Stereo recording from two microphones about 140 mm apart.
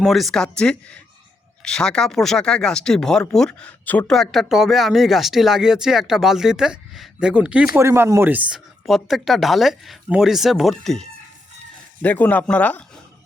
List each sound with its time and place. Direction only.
0.0 s speech: centre (ahead or behind)
7.8 s speech: 15° right (ahead or behind); by 11.0 s centre (ahead or behind)
12.0 s speech: 10° left (ahead or behind)